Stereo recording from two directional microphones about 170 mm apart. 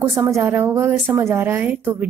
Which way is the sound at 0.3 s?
15° right (ahead or behind).